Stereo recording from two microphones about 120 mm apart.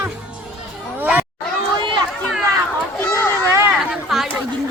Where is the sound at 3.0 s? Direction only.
20° left (ahead or behind).